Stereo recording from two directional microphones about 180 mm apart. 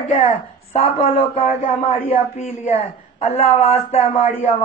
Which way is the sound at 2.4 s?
40° left (ahead or behind).